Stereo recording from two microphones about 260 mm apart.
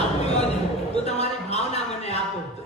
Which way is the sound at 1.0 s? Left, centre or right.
Left.